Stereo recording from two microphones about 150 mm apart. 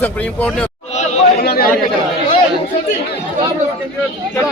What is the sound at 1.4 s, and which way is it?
Chatter, 85° left.